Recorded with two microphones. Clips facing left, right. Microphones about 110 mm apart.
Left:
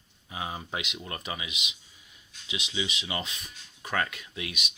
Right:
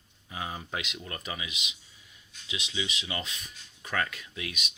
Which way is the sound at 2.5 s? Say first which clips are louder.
Left 2 dB; 5° left (ahead or behind).